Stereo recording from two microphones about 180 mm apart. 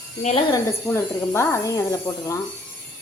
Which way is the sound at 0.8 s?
15° left (ahead or behind).